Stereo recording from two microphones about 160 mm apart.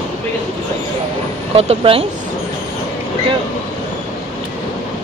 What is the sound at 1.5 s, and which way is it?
Speech, 35° right (ahead or behind).